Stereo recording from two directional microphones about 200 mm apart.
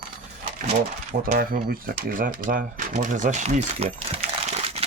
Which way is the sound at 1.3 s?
45° right (ahead or behind).